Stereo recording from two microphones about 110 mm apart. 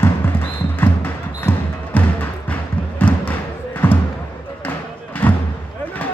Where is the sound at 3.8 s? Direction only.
20° left (ahead or behind).